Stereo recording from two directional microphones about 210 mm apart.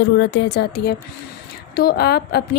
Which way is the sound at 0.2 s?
55° left (ahead or behind).